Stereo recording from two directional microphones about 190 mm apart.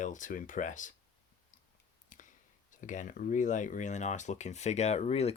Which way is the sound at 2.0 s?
40° left (ahead or behind).